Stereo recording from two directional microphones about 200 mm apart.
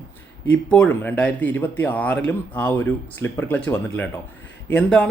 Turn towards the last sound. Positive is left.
turn(degrees=5)  # may be behind; listen again after turning